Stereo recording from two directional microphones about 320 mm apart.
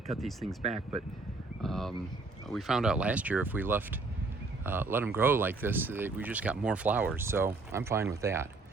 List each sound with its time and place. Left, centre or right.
0.1 s speech: centre
0.6 s speech: centre
1.6 s speech: centre